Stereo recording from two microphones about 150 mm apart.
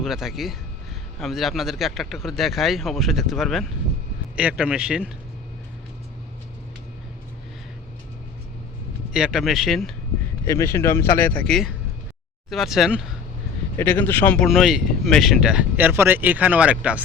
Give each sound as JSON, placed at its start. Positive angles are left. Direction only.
{"t": 0.0, "sound": "speech", "side_deg": 0}
{"t": 9.1, "sound": "speech", "side_deg": -5}
{"t": 10.4, "sound": "speech", "side_deg": 20}
{"t": 12.5, "sound": "speech", "side_deg": 0}
{"t": 13.7, "sound": "speech", "side_deg": 15}